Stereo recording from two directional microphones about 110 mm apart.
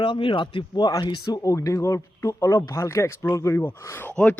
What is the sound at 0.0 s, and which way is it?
Speech, 50° left (ahead or behind).